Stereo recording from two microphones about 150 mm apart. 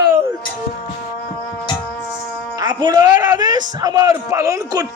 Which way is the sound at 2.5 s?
30° right (ahead or behind).